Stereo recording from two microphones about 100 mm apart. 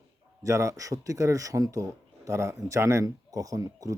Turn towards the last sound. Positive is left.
turn(degrees=-35)  # may be behind; listen again after turning